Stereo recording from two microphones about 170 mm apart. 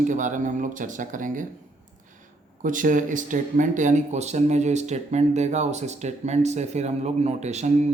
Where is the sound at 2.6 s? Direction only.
50° right (ahead or behind).